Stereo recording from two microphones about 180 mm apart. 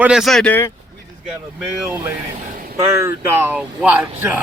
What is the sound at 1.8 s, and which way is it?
Speech, 15° right (ahead or behind).